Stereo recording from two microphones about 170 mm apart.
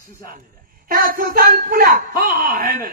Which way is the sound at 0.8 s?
55° right (ahead or behind).